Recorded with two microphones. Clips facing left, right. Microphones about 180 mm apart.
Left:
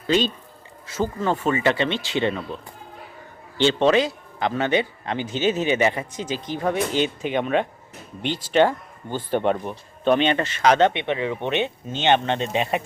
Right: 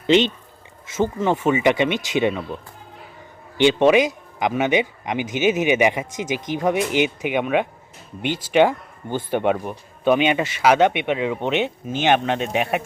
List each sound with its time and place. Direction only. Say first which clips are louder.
0.9 s speech: right 3 dB; 20° right (ahead or behind)
3.6 s speech: right 3 dB; 15° right (ahead or behind)